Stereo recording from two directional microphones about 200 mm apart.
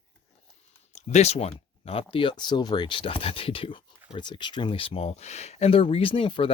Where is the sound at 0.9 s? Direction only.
35° left (ahead or behind).